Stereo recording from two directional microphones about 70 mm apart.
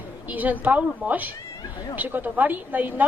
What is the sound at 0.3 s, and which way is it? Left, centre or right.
A woman's voice, right.